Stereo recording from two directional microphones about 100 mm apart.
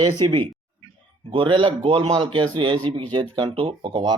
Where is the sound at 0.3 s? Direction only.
60° right (ahead or behind).